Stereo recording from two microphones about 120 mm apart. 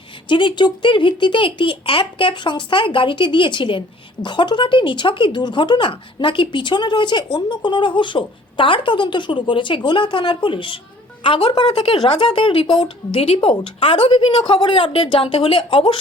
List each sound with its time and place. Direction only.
0.3 s a woman's voice: 40° left (ahead or behind)
13.1 s a woman's voice: 55° left (ahead or behind)